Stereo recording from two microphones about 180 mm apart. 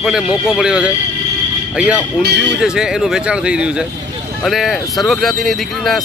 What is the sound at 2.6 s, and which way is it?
Speech, 5° right (ahead or behind).